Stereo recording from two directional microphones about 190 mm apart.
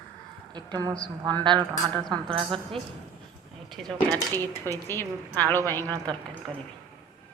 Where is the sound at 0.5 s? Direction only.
20° right (ahead or behind).